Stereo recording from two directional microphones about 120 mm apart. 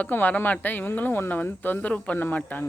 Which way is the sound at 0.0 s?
15° left (ahead or behind).